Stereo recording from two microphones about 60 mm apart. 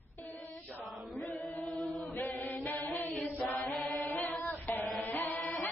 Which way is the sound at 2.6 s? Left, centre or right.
Left.